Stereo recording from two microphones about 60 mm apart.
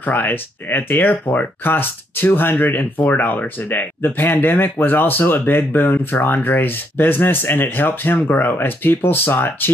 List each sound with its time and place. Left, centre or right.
0.0 s speech: left